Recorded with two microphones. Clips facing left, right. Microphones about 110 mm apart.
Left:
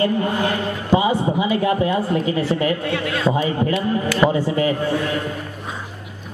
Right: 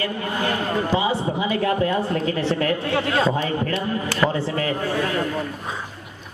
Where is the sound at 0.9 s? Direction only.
20° left (ahead or behind).